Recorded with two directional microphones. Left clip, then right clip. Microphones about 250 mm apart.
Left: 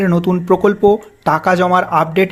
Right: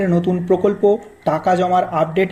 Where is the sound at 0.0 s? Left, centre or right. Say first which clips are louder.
Left 2 dB; left.